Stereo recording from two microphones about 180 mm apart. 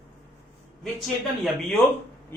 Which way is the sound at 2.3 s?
10° left (ahead or behind).